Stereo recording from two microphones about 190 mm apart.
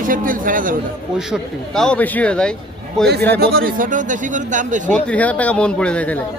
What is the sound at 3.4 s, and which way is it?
A man's voice, 50° right (ahead or behind).